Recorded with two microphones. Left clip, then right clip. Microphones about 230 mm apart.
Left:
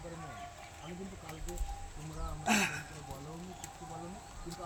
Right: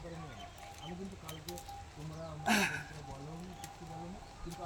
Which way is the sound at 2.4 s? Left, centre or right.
Centre.